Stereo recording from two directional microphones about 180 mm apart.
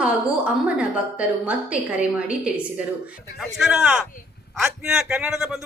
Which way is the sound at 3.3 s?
Centre (ahead or behind).